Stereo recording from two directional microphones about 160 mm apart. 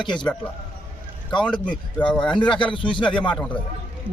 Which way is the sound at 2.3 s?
30° left (ahead or behind).